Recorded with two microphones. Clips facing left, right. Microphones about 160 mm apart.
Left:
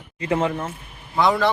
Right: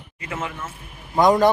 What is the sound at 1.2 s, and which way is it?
Speech, 40° right (ahead or behind).